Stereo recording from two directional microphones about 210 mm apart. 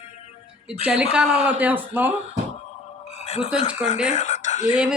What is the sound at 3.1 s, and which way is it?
Music, 30° left (ahead or behind).